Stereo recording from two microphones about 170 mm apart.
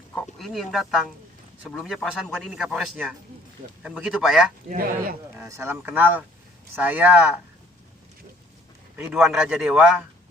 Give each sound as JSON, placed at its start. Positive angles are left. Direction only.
{"t": 0.1, "sound": "a man's voice", "side_deg": 5}
{"t": 4.7, "sound": "speech", "side_deg": -60}
{"t": 5.4, "sound": "speech", "side_deg": -15}
{"t": 9.1, "sound": "a man's voice", "side_deg": -5}